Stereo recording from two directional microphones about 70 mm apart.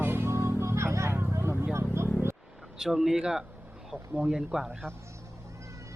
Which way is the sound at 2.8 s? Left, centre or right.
Centre.